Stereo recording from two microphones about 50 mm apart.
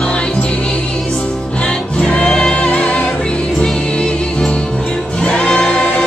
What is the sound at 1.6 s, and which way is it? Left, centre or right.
Music, centre.